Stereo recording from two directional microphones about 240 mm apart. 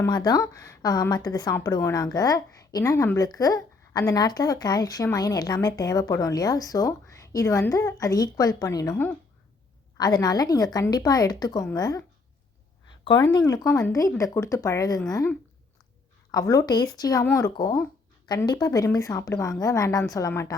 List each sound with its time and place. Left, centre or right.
0.0 s a woman's voice: centre
13.1 s a woman's voice: centre